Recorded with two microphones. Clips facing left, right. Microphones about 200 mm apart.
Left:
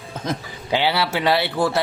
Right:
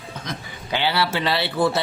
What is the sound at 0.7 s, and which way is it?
Speech, 20° left (ahead or behind).